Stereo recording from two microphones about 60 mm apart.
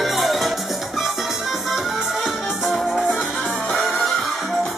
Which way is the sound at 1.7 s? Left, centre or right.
Centre.